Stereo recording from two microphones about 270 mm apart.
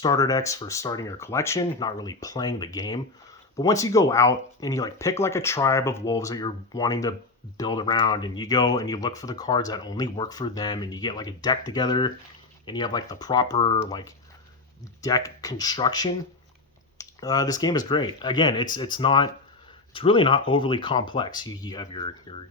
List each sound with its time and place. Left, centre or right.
0.0 s speech: centre